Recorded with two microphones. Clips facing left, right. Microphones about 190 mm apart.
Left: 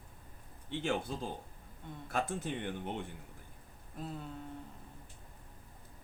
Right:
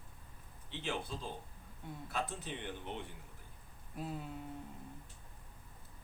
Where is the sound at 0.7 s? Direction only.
50° left (ahead or behind).